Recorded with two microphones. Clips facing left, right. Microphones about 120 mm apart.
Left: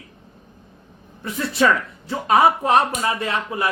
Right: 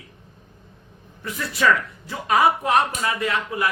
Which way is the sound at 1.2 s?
25° left (ahead or behind).